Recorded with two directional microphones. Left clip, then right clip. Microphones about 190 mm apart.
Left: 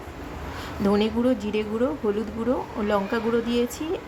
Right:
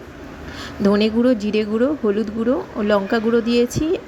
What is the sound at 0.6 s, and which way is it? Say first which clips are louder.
A woman's voice: right 5 dB; 20° right (ahead or behind).